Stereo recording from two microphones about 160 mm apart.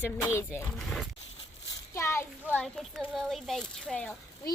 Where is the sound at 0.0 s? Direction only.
15° left (ahead or behind).